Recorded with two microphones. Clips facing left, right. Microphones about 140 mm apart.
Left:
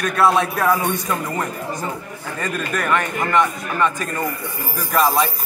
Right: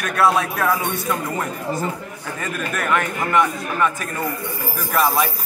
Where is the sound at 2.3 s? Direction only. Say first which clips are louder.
Left 2 dB; 5° right (ahead or behind).